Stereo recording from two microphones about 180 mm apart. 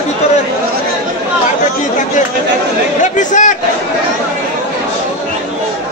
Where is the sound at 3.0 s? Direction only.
45° left (ahead or behind).